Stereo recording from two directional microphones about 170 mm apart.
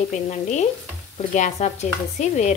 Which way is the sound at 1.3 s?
45° left (ahead or behind).